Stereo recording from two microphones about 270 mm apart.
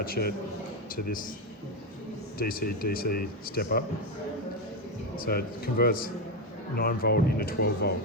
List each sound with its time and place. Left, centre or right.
0.0 s speech: left
2.4 s speech: left
5.1 s speech: left